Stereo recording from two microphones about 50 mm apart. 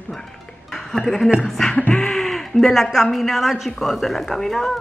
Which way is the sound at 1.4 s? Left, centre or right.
Centre.